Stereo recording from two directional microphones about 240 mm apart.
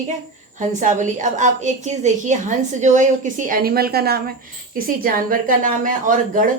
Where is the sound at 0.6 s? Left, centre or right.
Right.